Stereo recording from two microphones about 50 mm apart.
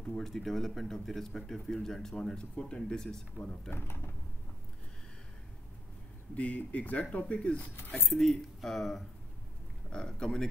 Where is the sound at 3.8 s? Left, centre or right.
Left.